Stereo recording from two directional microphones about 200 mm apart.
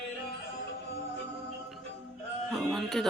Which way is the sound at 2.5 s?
Centre (ahead or behind).